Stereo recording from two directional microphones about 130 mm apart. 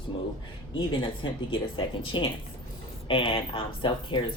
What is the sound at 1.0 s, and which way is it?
Speech, 40° left (ahead or behind).